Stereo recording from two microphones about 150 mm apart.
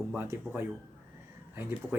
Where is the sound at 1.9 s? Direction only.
15° right (ahead or behind).